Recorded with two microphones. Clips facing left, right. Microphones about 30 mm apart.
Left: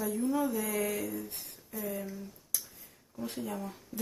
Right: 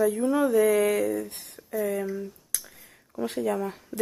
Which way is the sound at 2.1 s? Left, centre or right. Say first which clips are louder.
Right 9 dB; right.